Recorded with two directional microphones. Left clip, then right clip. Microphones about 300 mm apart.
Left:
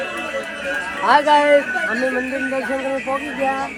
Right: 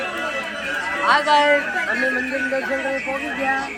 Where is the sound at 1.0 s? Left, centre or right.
Centre.